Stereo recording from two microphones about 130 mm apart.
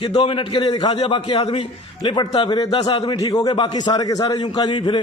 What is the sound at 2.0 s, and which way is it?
A man's voice, 35° left (ahead or behind).